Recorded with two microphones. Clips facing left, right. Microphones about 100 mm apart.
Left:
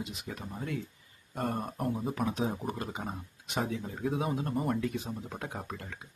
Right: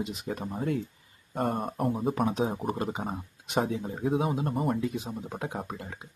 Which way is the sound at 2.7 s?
25° right (ahead or behind).